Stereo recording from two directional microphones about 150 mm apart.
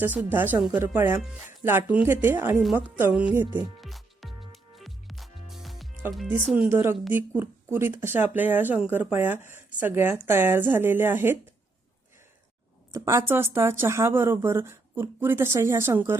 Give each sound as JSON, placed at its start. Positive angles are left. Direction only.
{"t": 0.0, "sound": "a woman's voice", "side_deg": -10}
{"t": 3.8, "sound": "music", "side_deg": 0}
{"t": 6.5, "sound": "a woman's voice", "side_deg": -10}
{"t": 12.9, "sound": "a woman's voice", "side_deg": -15}